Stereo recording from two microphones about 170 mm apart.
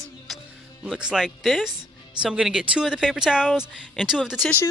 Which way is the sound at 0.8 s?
5° right (ahead or behind).